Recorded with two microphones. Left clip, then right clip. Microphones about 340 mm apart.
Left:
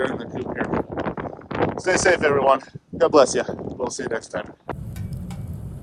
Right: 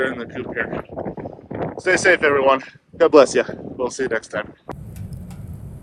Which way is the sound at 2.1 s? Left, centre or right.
Centre.